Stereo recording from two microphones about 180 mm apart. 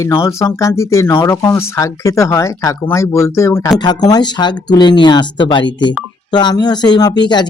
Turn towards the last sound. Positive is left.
turn(degrees=25)  # may be behind; listen again after turning